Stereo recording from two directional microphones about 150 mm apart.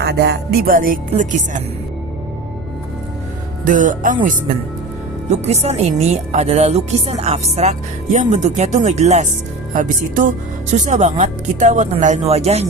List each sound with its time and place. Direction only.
0.0 s music: 90° right; by 0.9 s 70° right (ahead or behind)
1.1 s speech: 55° right (ahead or behind)
3.6 s speech: 60° right (ahead or behind)
5.3 s a woman's voice: 45° right (ahead or behind)
9.7 s a woman's voice: 60° right (ahead or behind); by 12.6 s 45° right (ahead or behind)